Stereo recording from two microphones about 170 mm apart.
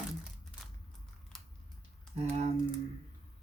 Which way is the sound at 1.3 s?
Centre (ahead or behind).